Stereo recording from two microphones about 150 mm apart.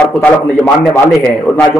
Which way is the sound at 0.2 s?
10° left (ahead or behind).